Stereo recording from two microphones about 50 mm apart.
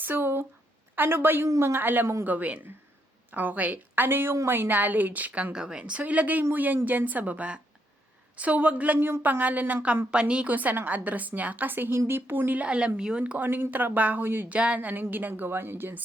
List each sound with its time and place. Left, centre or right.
0.0 s a sound: right
0.9 s a woman's voice: right
5.5 s a woman's voice: centre; by 10.0 s right
10.1 s speech: right
10.5 s a woman's voice: right
12.5 s speech: right
13.4 s a woman's voice: right
14.5 s speech: right
14.8 s a woman's voice: right